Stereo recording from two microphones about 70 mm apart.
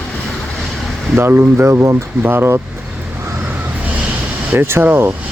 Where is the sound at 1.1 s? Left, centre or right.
Right.